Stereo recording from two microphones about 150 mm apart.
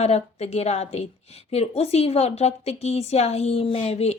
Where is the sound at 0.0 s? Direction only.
45° left (ahead or behind).